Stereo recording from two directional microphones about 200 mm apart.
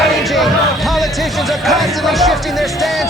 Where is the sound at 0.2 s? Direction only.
Centre (ahead or behind).